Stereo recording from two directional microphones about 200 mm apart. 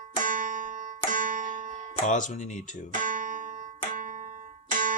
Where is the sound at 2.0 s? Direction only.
40° left (ahead or behind).